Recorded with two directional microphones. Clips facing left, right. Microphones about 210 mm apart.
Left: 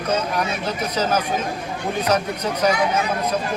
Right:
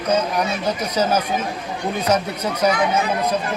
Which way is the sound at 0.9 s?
10° right (ahead or behind).